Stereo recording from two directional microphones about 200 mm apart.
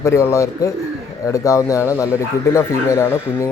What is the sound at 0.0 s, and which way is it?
Speech, 15° left (ahead or behind).